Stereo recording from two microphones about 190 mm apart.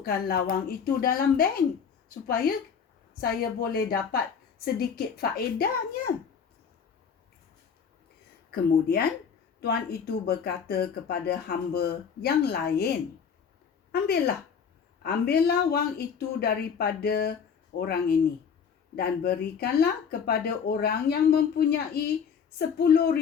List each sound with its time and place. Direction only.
0.0 s a woman's voice: 50° left (ahead or behind)
8.4 s speech: 55° left (ahead or behind)
15.0 s speech: 55° left (ahead or behind)